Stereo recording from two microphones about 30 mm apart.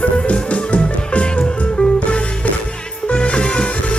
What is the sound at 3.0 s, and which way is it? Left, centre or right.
Music, left.